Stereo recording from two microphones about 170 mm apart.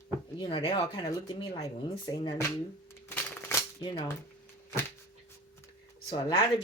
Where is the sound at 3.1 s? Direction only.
10° left (ahead or behind).